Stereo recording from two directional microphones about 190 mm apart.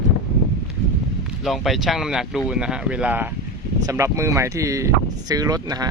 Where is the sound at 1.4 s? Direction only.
Centre (ahead or behind); by 5.9 s 20° right (ahead or behind).